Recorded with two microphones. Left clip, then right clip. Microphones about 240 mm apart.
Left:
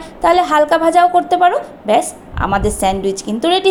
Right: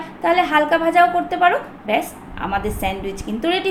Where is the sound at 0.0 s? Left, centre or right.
Left.